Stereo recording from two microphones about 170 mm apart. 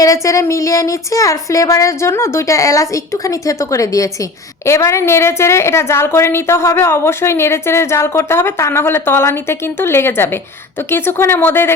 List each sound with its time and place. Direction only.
0.0 s a woman's voice: 20° left (ahead or behind)